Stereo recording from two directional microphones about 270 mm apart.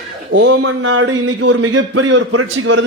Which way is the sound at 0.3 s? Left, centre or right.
Right.